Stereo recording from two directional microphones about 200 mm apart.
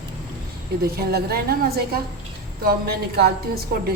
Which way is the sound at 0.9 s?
50° right (ahead or behind).